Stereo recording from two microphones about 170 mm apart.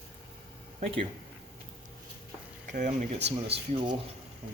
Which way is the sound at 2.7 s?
50° right (ahead or behind).